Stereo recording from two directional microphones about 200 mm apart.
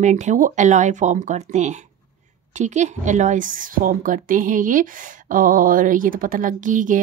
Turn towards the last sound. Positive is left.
turn(degrees=-40)  # may be behind; listen again after turning